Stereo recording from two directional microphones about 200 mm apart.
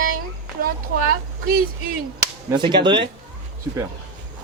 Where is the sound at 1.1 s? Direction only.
50° right (ahead or behind).